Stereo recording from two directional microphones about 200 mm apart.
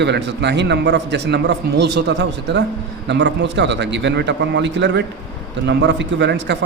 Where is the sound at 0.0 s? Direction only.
60° right (ahead or behind).